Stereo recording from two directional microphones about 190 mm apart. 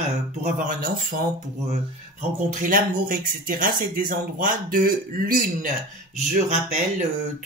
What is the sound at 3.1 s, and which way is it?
Speech, 45° right (ahead or behind).